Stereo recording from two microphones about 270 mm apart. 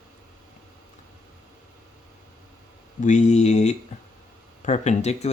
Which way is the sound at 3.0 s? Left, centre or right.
Left.